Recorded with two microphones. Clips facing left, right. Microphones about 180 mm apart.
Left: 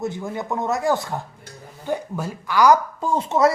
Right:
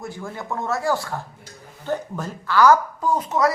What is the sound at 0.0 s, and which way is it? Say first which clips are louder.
Speech: left 5 dB; 20° left (ahead or behind).